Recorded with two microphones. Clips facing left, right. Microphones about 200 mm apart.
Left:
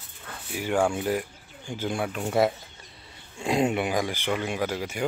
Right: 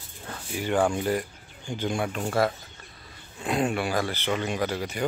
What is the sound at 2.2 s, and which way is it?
Speech, 20° left (ahead or behind).